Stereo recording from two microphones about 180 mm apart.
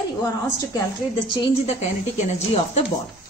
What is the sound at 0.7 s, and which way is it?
A woman's voice, 25° left (ahead or behind).